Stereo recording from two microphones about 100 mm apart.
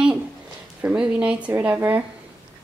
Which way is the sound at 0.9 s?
10° right (ahead or behind).